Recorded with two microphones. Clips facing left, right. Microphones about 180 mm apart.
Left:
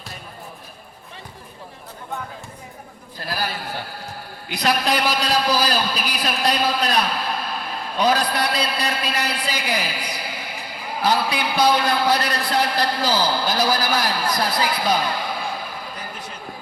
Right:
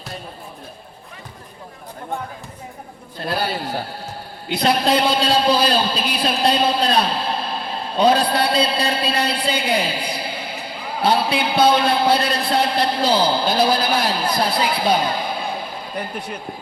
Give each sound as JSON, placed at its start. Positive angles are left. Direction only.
{"t": 3.2, "sound": "a man's voice", "side_deg": -25}